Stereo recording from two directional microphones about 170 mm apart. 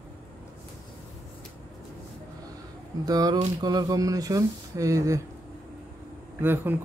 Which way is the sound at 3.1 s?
20° right (ahead or behind).